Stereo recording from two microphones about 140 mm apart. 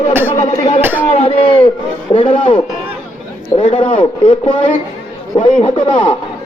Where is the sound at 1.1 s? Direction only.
45° left (ahead or behind).